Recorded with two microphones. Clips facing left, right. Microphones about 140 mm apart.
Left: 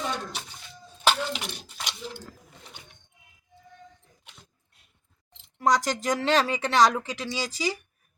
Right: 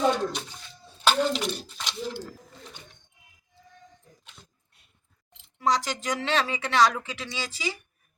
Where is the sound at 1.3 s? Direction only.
10° left (ahead or behind).